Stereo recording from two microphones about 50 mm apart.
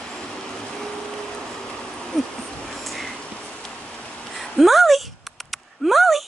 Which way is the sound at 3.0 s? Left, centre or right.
Left.